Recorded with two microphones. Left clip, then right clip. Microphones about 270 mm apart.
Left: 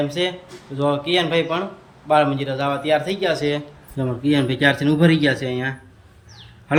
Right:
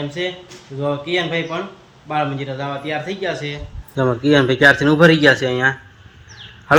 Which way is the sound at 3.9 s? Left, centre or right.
Centre.